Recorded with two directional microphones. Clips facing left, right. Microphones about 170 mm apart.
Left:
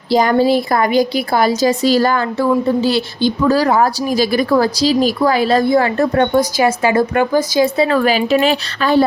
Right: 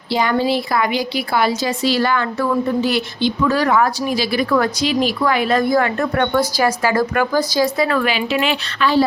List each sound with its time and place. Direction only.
0.1 s a woman's voice: 40° left (ahead or behind)